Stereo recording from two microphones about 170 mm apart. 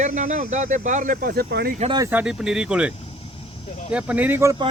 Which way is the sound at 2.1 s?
5° right (ahead or behind).